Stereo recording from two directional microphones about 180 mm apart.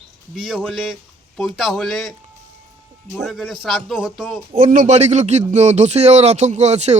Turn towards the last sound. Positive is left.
turn(degrees=-40)  # may be behind; listen again after turning